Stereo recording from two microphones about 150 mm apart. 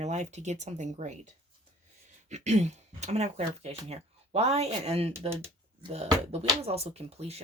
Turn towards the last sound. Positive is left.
turn(degrees=-45)  # may be behind; listen again after turning